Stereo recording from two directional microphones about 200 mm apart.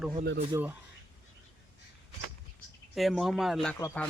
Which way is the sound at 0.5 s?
15° right (ahead or behind).